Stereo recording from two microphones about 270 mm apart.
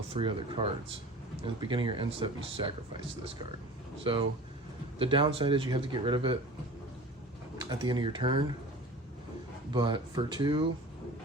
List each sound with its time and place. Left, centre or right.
0.1 s speech: centre
4.1 s speech: centre
7.6 s speech: centre
9.7 s speech: centre